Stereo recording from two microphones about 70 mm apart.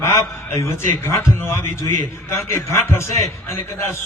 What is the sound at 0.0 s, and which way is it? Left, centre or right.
A man's voice, left.